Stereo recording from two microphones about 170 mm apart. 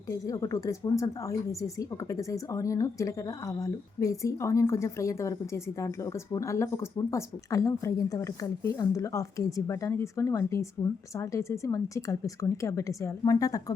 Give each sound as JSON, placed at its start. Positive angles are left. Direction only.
{"t": 0.1, "sound": "a woman's voice", "side_deg": 20}